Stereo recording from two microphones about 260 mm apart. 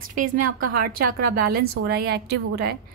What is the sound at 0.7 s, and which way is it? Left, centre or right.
A woman's voice, right.